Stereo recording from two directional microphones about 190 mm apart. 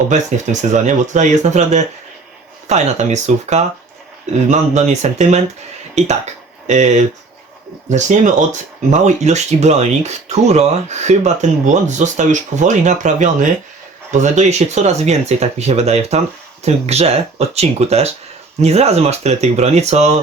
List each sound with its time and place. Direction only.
0.7 s speech: 40° right (ahead or behind)